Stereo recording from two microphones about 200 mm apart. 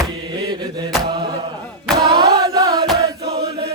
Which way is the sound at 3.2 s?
55° right (ahead or behind).